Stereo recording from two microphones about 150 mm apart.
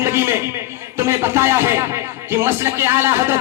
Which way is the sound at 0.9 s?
15° right (ahead or behind).